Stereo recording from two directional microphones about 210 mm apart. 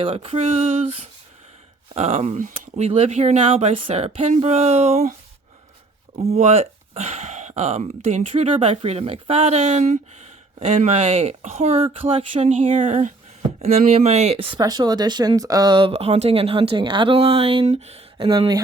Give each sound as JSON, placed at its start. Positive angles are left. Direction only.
{"t": 0.0, "sound": "speech", "side_deg": -25}
{"t": 6.3, "sound": "speech", "side_deg": -30}